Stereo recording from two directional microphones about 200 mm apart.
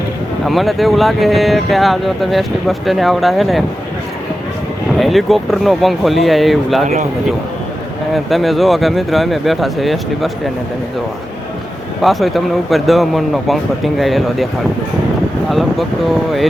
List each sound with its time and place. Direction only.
0.4 s speech: centre (ahead or behind)
4.9 s speech: centre (ahead or behind)
6.8 s speech: 35° right (ahead or behind)
8.1 s speech: centre (ahead or behind)
12.0 s speech: centre (ahead or behind)
15.4 s speech: centre (ahead or behind)